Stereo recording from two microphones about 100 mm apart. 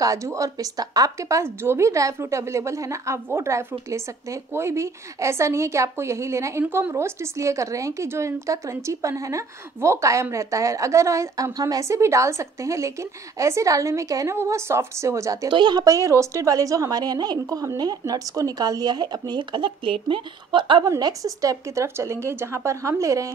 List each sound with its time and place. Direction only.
0.0 s a woman's voice: 35° right (ahead or behind)
15.5 s a woman's voice: 45° right (ahead or behind)
21.0 s a woman's voice: 35° right (ahead or behind)